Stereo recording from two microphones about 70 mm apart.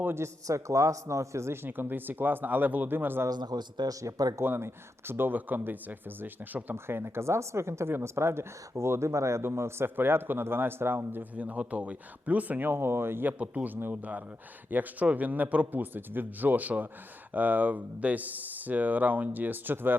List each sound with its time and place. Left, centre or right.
0.0 s a man's voice: right
0.4 s a man's voice: right
1.6 s speech: right
3.2 s speech: right
4.0 s speech: right
4.4 s speech: right
6.7 s speech: right
11.3 s speech: centre; by 13.3 s right
13.4 s speech: centre